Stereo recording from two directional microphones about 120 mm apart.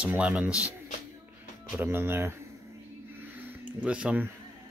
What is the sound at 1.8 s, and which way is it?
Speech, 20° right (ahead or behind).